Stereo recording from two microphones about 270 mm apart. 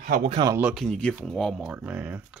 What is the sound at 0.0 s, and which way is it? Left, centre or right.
Speech, right.